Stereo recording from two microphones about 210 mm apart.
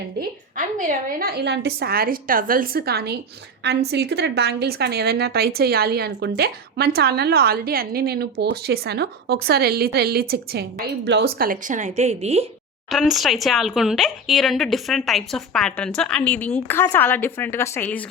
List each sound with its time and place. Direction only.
0.2 s a woman's voice: 40° right (ahead or behind)
12.9 s speech: centre (ahead or behind)